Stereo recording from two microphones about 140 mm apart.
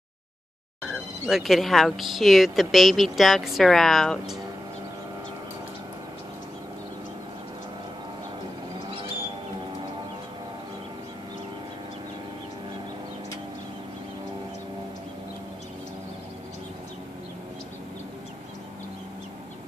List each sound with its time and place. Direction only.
0.8 s speech: centre (ahead or behind)